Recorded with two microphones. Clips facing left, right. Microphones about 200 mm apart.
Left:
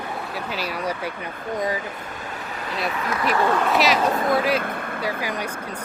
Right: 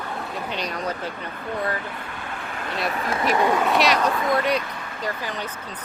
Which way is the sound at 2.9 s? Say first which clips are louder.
Even; 30° right (ahead or behind).